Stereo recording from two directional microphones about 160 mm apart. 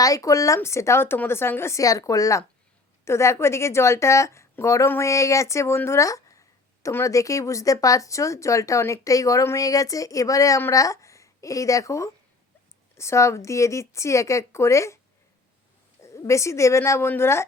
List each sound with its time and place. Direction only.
0.0 s speech: 20° left (ahead or behind)
16.0 s speech: 15° left (ahead or behind)